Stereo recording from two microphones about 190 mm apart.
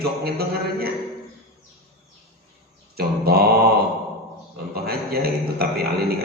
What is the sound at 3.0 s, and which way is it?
Mantra, 55° right (ahead or behind).